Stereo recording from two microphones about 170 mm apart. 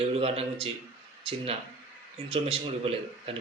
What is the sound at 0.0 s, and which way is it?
Speech, 35° right (ahead or behind).